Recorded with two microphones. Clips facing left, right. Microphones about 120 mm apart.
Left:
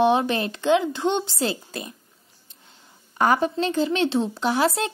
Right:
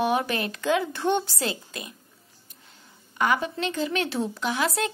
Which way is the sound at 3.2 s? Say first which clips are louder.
Left 4 dB; 35° left (ahead or behind).